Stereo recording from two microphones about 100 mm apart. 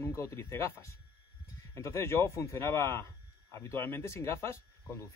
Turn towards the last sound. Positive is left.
turn(degrees=30)  # may be behind; listen again after turning